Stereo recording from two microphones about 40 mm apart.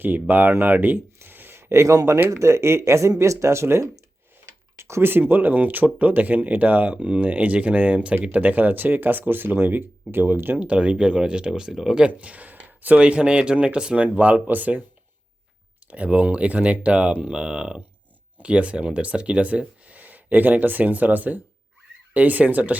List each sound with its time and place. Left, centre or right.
0.0 s speech: right
0.6 s a sound: right
2.0 s speech: right
4.8 s speech: right
10.6 s speech: right
11.7 s speech: centre
11.9 s speech: right
13.0 s speech: right
14.2 s speech: right
15.9 s speech: right